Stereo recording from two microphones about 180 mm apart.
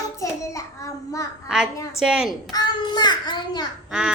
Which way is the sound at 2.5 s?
25° left (ahead or behind).